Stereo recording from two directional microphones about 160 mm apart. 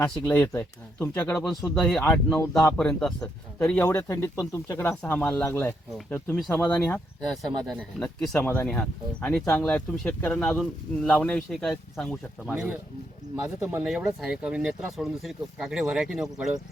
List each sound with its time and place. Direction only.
0.0 s speech: 15° left (ahead or behind)
1.5 s speech: 5° left (ahead or behind)